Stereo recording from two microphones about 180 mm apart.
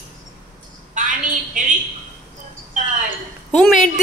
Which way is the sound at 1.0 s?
45° right (ahead or behind).